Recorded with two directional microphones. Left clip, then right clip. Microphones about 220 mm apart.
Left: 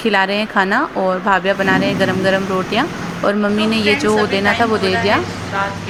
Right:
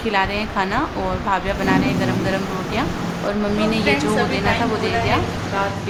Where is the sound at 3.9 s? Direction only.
25° left (ahead or behind).